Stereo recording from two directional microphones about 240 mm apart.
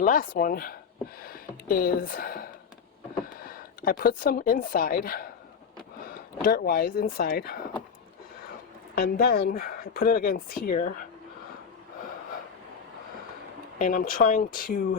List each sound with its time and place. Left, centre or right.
0.0 s speech: left
3.4 s speech: left
9.0 s speech: left
13.7 s speech: left